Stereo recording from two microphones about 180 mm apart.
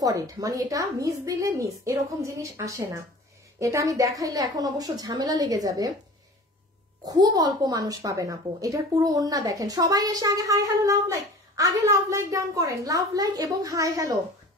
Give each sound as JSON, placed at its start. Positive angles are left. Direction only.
{"t": 0.0, "sound": "a woman's voice", "side_deg": -20}
{"t": 7.1, "sound": "a woman's voice", "side_deg": -20}